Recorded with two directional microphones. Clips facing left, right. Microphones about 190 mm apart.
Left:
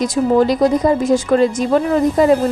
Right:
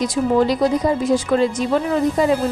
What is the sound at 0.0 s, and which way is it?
Speech, 45° left (ahead or behind).